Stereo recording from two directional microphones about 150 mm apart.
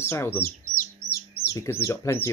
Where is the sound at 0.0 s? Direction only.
15° left (ahead or behind).